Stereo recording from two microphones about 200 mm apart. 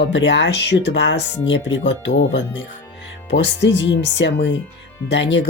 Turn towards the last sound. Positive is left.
turn(degrees=65)  # may be behind; listen again after turning